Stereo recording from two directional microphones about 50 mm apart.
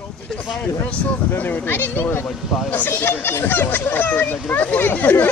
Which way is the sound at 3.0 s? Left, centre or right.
Left.